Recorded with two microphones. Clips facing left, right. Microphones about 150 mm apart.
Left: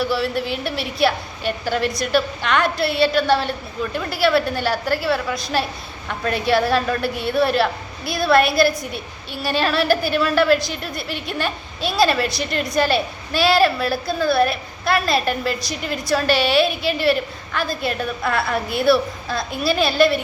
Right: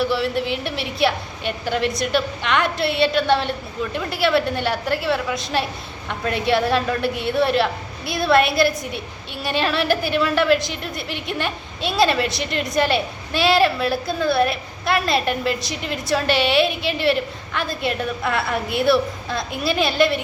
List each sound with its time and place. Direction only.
0.0 s a woman's voice: 20° right (ahead or behind)